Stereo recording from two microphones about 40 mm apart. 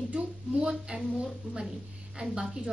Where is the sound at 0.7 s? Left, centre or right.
Centre.